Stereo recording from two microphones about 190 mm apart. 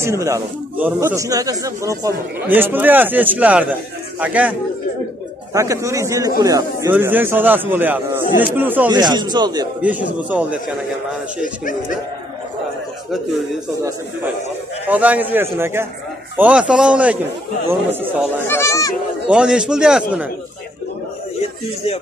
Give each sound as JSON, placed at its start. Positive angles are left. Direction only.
{"t": 0.0, "sound": "speech", "side_deg": -15}
{"t": 8.9, "sound": "speech", "side_deg": -20}
{"t": 9.8, "sound": "speech", "side_deg": -10}
{"t": 11.4, "sound": "speech", "side_deg": 45}
{"t": 14.9, "sound": "a man's voice", "side_deg": -10}
{"t": 18.5, "sound": "speech", "side_deg": 15}
{"t": 19.2, "sound": "a man's voice", "side_deg": -5}